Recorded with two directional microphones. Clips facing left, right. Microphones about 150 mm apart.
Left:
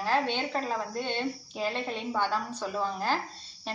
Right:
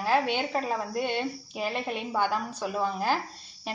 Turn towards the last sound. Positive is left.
turn(degrees=-10)  # may be behind; listen again after turning